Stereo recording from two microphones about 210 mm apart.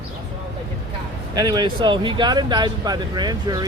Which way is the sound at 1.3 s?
20° right (ahead or behind).